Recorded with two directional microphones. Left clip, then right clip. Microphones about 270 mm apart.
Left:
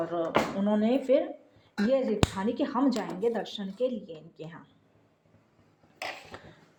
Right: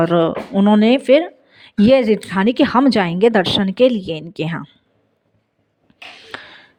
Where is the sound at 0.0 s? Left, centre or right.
Right.